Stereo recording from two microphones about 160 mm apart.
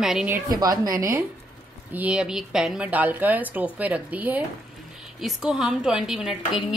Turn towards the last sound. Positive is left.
turn(degrees=-5)  # may be behind; listen again after turning